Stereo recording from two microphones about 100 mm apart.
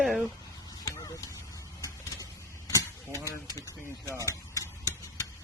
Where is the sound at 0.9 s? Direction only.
35° left (ahead or behind).